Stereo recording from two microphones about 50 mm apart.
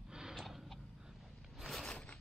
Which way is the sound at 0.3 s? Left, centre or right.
Centre.